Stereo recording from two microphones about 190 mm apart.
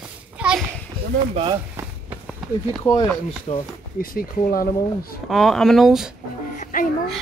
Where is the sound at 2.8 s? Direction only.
20° left (ahead or behind).